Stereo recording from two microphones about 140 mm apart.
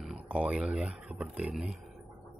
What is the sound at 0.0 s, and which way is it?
Speech, 5° right (ahead or behind).